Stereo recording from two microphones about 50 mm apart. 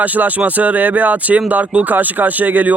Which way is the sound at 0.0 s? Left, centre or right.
Right.